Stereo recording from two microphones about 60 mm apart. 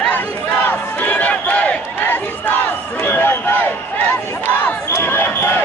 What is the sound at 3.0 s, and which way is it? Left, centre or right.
Run, left.